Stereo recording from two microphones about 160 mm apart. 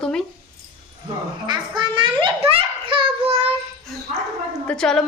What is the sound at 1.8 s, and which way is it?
Child singing, 30° right (ahead or behind).